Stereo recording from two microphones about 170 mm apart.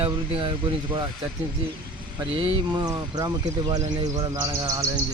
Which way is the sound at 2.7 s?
20° right (ahead or behind).